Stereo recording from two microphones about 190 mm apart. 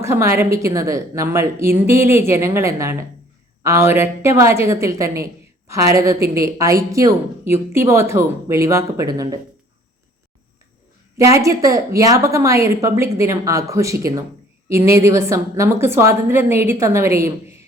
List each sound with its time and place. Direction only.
0.0 s a woman's voice: 15° right (ahead or behind)
11.2 s a woman's voice: 15° right (ahead or behind)